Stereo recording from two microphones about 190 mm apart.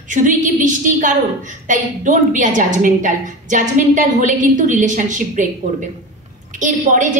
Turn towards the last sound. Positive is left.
turn(degrees=-40)  # may be behind; listen again after turning